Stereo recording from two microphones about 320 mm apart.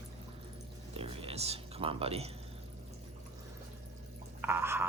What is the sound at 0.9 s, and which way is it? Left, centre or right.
Speech, centre.